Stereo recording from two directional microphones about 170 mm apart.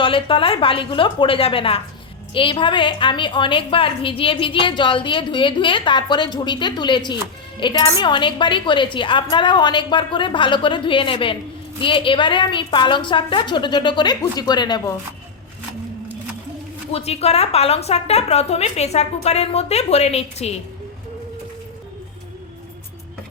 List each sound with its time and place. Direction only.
0.0 s a woman's voice: 30° left (ahead or behind)
16.9 s a woman's voice: 35° left (ahead or behind)